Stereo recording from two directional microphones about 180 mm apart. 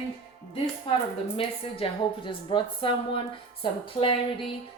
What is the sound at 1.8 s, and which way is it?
Speech, 30° left (ahead or behind).